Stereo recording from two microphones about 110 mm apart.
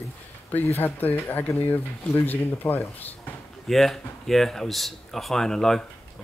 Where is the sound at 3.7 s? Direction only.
Centre (ahead or behind).